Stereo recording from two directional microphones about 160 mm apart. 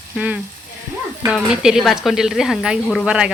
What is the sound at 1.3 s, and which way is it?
Speech, 5° right (ahead or behind).